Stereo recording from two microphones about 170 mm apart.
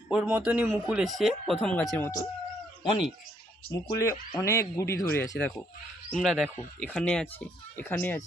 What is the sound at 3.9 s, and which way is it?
Speech, 20° left (ahead or behind).